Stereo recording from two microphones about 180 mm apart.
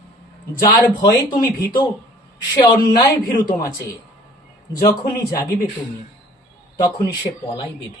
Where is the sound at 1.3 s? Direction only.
25° left (ahead or behind).